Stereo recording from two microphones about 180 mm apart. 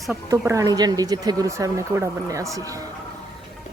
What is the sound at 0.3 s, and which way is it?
Speech, 15° right (ahead or behind).